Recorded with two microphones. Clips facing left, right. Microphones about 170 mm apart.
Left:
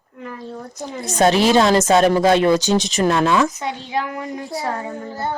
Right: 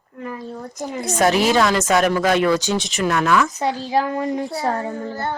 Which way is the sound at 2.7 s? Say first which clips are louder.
Left 3 dB; 40° left (ahead or behind).